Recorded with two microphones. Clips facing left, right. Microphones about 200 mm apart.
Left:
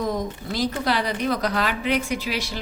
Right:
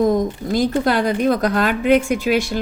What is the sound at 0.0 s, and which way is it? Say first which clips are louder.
A woman's voice: right 9 dB; 50° right (ahead or behind).